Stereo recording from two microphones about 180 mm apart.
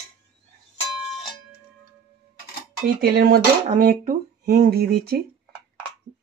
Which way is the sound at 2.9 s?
55° right (ahead or behind).